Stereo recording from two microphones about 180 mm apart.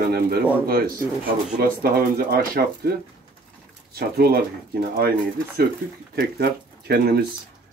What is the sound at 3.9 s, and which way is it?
Speech, 60° right (ahead or behind).